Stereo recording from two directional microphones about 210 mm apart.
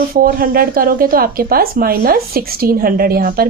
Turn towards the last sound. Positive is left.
turn(degrees=-45)  # may be behind; listen again after turning